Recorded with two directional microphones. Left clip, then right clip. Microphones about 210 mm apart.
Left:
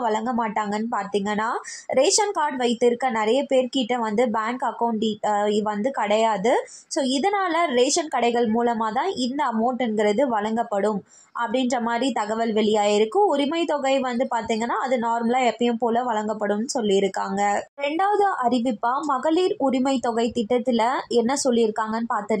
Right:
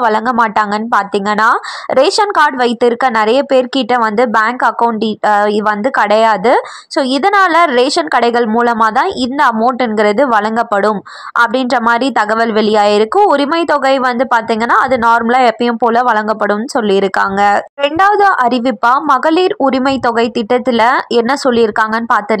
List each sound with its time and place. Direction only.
0.0 s a woman's voice: 15° right (ahead or behind)